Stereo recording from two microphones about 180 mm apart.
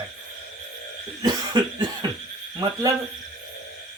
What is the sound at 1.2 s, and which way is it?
Speech, 25° right (ahead or behind).